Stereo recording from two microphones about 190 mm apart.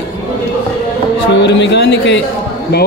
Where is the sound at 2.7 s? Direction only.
55° left (ahead or behind).